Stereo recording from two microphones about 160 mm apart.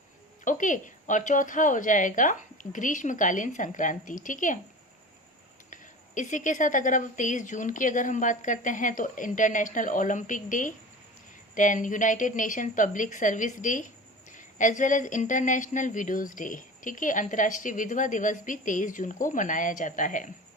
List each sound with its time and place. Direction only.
0.4 s speech: 55° left (ahead or behind)
5.7 s speech: 55° left (ahead or behind)